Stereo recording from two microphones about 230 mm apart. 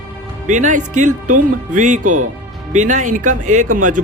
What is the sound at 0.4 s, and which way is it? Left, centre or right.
Speech, right.